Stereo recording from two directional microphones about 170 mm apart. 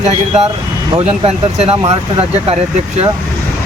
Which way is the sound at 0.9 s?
35° right (ahead or behind).